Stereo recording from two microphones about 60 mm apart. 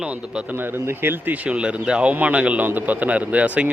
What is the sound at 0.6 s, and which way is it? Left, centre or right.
Speech, right.